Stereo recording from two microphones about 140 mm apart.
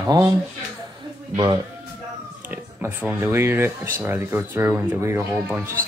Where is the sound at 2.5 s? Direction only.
10° right (ahead or behind).